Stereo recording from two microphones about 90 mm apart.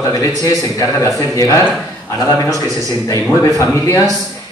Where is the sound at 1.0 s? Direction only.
40° left (ahead or behind).